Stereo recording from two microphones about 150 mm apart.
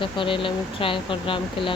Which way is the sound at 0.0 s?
35° left (ahead or behind).